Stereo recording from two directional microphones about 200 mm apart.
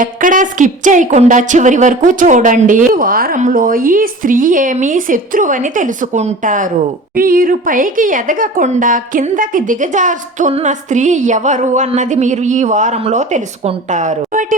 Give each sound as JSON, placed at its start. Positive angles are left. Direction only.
{"t": 0.0, "sound": "a woman's voice", "side_deg": -40}